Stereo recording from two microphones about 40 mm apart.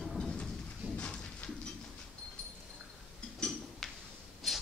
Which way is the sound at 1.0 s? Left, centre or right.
Left.